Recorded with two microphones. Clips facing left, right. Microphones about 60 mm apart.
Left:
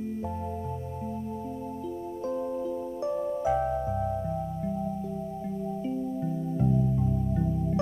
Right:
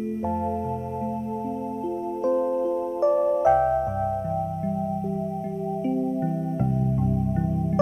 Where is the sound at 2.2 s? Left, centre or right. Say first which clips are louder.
Right 8 dB; right.